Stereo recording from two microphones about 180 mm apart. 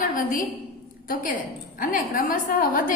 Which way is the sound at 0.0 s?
50° left (ahead or behind).